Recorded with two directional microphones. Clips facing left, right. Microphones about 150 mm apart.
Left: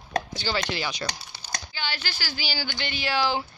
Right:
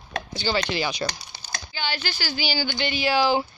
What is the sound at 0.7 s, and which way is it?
Speech, 15° right (ahead or behind).